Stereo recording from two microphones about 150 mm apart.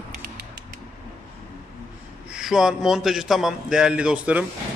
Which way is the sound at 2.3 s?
5° right (ahead or behind).